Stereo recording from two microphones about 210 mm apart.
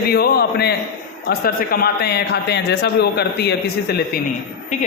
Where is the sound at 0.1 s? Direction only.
45° left (ahead or behind).